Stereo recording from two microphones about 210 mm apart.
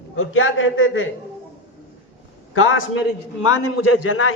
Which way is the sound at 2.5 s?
75° left (ahead or behind).